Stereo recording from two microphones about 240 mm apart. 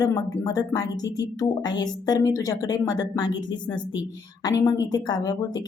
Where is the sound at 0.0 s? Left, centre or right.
Centre.